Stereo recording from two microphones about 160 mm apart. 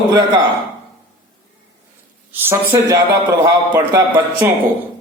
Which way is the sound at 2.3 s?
15° right (ahead or behind).